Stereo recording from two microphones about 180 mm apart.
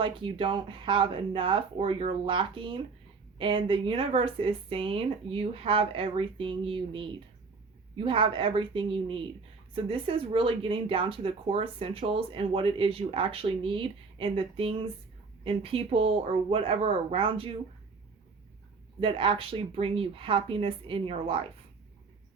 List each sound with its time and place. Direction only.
0.0 s speech: 30° right (ahead or behind)
18.9 s speech: 30° right (ahead or behind)